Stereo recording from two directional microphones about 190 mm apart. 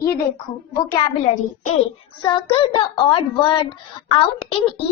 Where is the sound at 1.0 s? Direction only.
25° left (ahead or behind).